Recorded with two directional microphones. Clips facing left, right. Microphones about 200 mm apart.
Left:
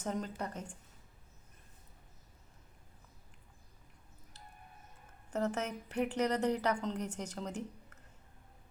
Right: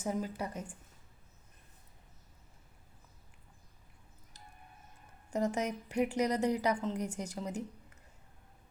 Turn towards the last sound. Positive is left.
turn(degrees=-10)  # may be behind; listen again after turning